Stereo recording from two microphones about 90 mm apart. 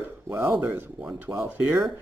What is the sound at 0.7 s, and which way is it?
Speech, 20° right (ahead or behind).